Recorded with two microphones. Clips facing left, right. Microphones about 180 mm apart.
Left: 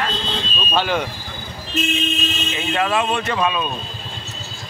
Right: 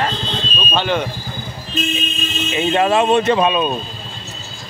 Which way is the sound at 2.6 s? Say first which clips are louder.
Right 6 dB; 25° right (ahead or behind).